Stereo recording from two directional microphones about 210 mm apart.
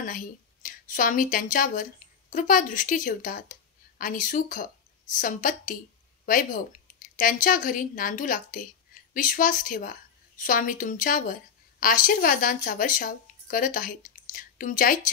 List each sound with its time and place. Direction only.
0.0 s a woman's voice: 40° left (ahead or behind)